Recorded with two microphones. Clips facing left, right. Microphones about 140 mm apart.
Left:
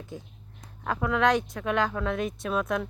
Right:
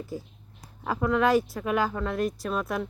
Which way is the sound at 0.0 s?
5° right (ahead or behind).